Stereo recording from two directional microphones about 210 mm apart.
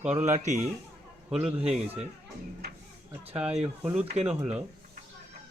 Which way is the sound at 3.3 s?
5° right (ahead or behind).